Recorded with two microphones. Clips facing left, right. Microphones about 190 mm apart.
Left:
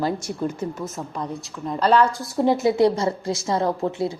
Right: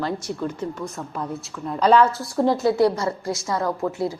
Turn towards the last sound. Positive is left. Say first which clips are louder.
# left 1 dB
turn(degrees=25)  # may be behind; listen again after turning